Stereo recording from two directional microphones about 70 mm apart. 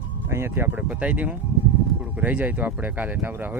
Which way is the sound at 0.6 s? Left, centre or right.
Right.